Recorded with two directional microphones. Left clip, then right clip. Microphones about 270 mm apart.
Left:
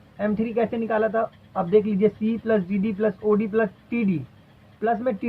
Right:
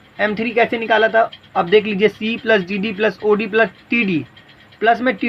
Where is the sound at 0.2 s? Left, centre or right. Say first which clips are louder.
Right 8 dB; right.